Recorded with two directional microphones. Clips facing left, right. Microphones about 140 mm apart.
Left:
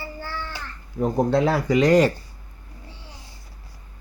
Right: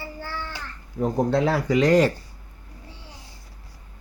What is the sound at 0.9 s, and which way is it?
Speech, 15° left (ahead or behind).